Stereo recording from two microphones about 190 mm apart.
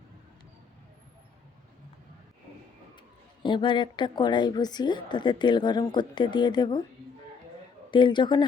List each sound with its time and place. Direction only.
3.4 s a woman's voice: 25° left (ahead or behind)
7.9 s a woman's voice: 25° left (ahead or behind)